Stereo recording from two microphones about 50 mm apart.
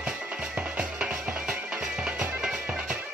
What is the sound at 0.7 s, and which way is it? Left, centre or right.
Music, right.